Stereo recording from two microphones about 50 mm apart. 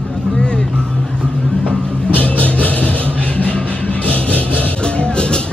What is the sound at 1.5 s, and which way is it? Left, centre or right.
Music, centre.